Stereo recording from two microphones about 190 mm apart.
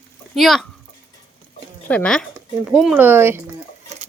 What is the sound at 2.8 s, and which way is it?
Speech, 5° right (ahead or behind).